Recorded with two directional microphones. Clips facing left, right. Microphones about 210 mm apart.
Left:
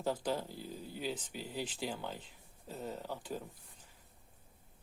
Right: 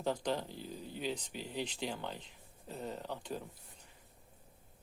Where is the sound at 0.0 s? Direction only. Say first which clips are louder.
Even; 5° left (ahead or behind).